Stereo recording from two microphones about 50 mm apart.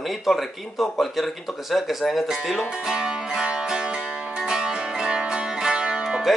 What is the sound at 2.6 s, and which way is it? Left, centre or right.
Music, centre.